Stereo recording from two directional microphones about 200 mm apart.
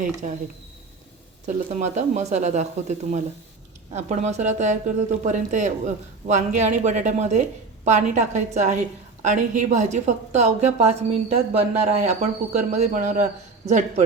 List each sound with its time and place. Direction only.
0.0 s a woman's voice: 40° right (ahead or behind)
1.5 s a woman's voice: 35° right (ahead or behind)